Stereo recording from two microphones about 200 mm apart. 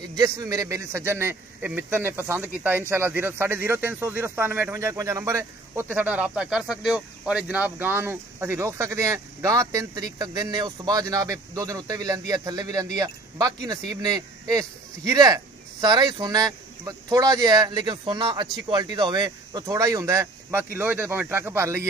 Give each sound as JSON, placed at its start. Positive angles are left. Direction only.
{"t": 0.0, "sound": "speech", "side_deg": -20}